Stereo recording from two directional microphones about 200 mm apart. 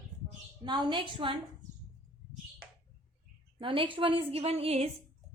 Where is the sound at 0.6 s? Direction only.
20° right (ahead or behind).